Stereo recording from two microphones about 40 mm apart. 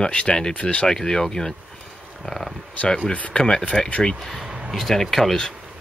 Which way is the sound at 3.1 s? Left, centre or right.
Left.